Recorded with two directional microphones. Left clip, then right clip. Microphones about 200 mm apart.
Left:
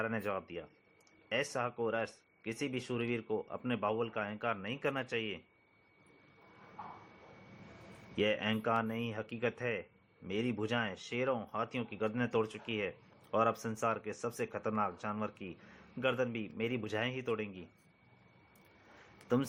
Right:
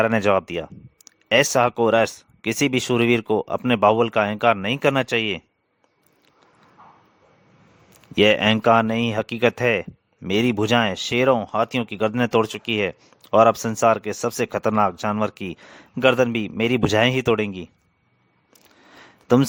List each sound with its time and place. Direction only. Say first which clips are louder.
0.0 s speech: right 19 dB; 60° right (ahead or behind)
8.1 s speech: right 17 dB; 60° right (ahead or behind)
19.3 s speech: right 16 dB; 60° right (ahead or behind)